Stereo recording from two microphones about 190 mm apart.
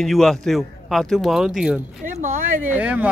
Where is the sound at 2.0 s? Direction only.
45° right (ahead or behind).